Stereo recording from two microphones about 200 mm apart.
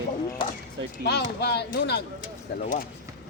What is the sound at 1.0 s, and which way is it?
Speech, 55° left (ahead or behind).